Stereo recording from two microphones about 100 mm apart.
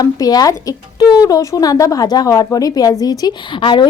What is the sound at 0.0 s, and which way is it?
A woman's voice, 40° left (ahead or behind).